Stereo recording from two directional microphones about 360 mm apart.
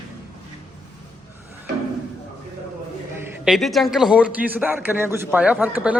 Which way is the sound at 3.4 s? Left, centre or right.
Centre.